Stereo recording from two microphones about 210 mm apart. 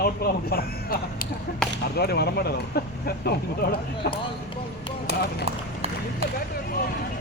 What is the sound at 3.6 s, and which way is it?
Speech, 50° left (ahead or behind).